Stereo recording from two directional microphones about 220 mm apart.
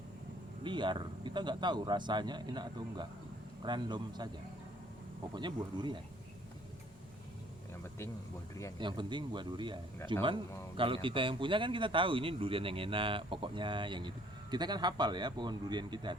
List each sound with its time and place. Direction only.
0.6 s speech: 20° right (ahead or behind)
5.3 s speech: 20° right (ahead or behind)
8.8 s speech: 20° right (ahead or behind)